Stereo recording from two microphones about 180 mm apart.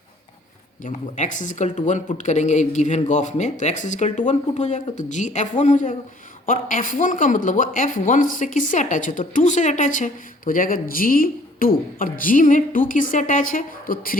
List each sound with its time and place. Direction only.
0.9 s speech: 45° left (ahead or behind)